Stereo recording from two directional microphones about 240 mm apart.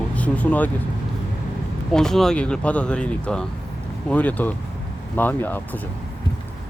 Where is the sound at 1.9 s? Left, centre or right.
Centre.